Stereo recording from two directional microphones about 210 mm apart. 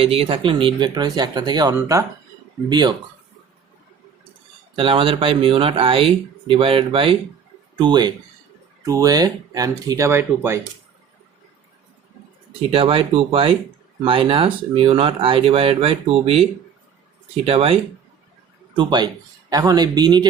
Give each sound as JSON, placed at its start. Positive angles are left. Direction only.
{"t": 0.0, "sound": "speech", "side_deg": -25}
{"t": 4.7, "sound": "speech", "side_deg": -25}
{"t": 12.7, "sound": "speech", "side_deg": -25}
{"t": 18.8, "sound": "speech", "side_deg": -20}